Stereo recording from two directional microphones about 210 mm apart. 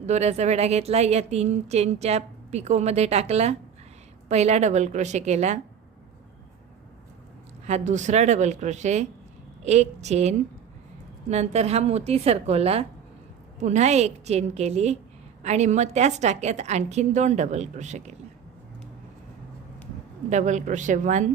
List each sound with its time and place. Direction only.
0.0 s a woman's voice: 30° right (ahead or behind)
7.7 s a woman's voice: 35° right (ahead or behind)
20.3 s a woman's voice: 35° right (ahead or behind)